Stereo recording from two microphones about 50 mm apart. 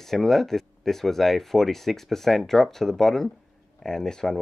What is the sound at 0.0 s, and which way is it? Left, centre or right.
Speech, centre.